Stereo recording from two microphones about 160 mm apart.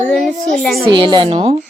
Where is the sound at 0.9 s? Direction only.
30° right (ahead or behind).